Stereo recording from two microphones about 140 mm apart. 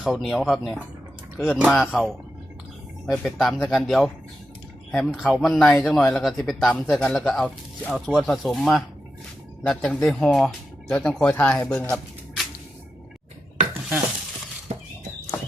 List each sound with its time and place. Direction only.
0.0 s speech: centre (ahead or behind)
3.1 s speech: centre (ahead or behind)
14.7 s a sound: 50° right (ahead or behind)